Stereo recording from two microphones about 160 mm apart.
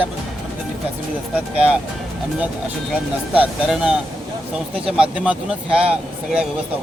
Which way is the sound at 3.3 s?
5° right (ahead or behind).